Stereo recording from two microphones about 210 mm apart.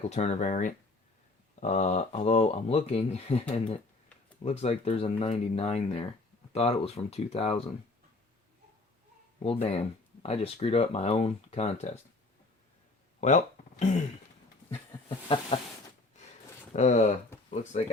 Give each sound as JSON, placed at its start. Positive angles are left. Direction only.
{"t": 0.1, "sound": "speech", "side_deg": 30}
{"t": 9.4, "sound": "speech", "side_deg": 30}
{"t": 13.1, "sound": "speech", "side_deg": 35}
{"t": 15.3, "sound": "speech", "side_deg": 25}
{"t": 16.7, "sound": "speech", "side_deg": 35}